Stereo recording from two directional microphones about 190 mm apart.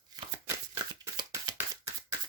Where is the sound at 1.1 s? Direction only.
20° right (ahead or behind).